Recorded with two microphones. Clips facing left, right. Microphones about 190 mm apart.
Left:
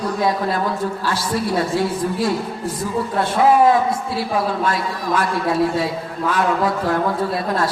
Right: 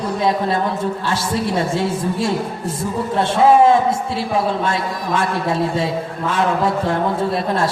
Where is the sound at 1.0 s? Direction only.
25° right (ahead or behind).